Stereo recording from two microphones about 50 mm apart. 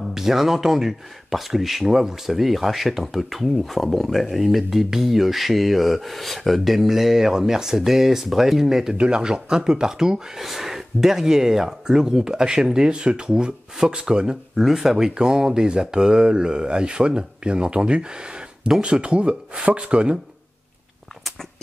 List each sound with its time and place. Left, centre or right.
0.1 s speech: centre
8.9 s speech: centre
14.5 s speech: centre; by 20.2 s right